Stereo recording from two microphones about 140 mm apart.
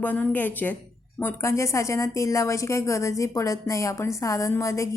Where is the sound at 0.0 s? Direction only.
10° left (ahead or behind).